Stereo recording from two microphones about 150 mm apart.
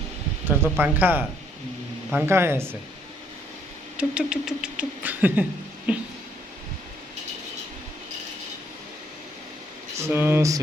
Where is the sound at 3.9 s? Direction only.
5° right (ahead or behind).